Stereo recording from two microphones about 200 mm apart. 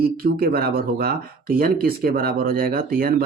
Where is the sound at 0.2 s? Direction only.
50° right (ahead or behind).